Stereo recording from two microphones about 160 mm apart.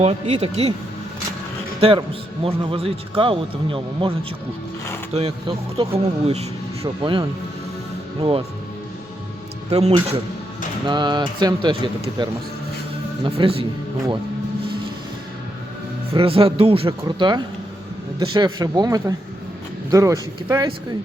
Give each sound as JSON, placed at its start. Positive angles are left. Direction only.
{"t": 0.0, "sound": "a man's voice", "side_deg": -40}
{"t": 1.8, "sound": "a man's voice", "side_deg": -35}
{"t": 5.1, "sound": "a man's voice", "side_deg": -35}
{"t": 9.6, "sound": "speech", "side_deg": -40}
{"t": 10.8, "sound": "a man's voice", "side_deg": -30}
{"t": 16.1, "sound": "a man's voice", "side_deg": -35}